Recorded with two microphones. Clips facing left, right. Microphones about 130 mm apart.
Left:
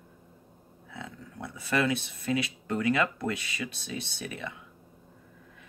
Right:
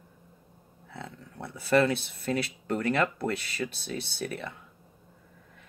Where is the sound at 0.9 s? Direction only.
35° right (ahead or behind).